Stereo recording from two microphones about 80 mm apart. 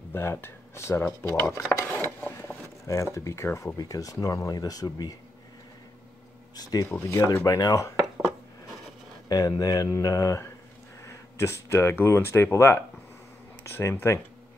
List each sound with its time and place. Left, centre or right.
0.1 s speech: left
1.9 s a sound: left
2.9 s speech: left
3.7 s speech: left
6.5 s speech: left
7.0 s speech: left
9.3 s speech: left